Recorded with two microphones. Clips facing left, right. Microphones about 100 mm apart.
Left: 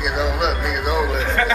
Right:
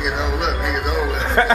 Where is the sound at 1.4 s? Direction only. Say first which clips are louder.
Right 5 dB; 40° right (ahead or behind).